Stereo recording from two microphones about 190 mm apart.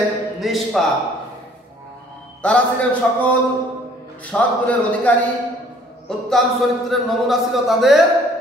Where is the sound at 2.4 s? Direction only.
5° left (ahead or behind).